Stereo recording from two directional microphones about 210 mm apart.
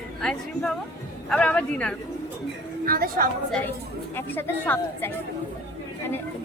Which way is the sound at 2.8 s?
45° right (ahead or behind).